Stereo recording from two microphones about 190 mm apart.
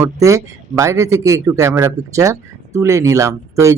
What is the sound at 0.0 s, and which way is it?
Speech, 15° right (ahead or behind).